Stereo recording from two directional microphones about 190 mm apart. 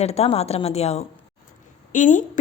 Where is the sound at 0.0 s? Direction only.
35° left (ahead or behind).